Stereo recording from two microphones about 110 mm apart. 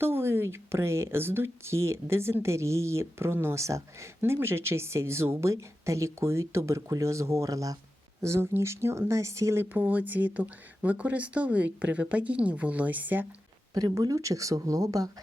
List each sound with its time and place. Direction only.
0.0 s a woman's voice: 20° right (ahead or behind)
9.7 s speech: 15° right (ahead or behind)
13.7 s speech: 35° right (ahead or behind)